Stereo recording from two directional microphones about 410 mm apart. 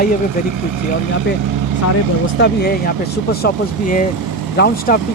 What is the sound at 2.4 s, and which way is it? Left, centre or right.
Speech, left.